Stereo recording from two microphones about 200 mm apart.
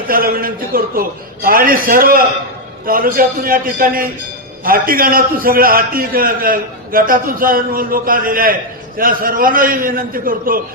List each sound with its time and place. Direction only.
0.1 s a man's voice: 45° right (ahead or behind)